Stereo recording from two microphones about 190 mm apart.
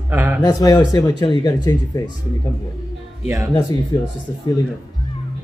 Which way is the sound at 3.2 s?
15° right (ahead or behind).